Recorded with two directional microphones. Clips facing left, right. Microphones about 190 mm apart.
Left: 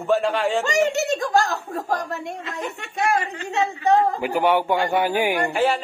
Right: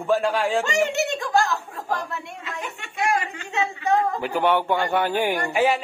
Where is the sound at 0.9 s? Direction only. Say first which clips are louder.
Left 3 dB; 40° left (ahead or behind).